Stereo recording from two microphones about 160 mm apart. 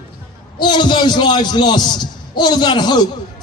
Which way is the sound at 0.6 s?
30° left (ahead or behind).